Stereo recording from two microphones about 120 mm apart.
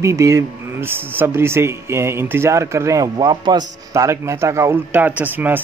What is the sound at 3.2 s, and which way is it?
A man's voice, 40° right (ahead or behind).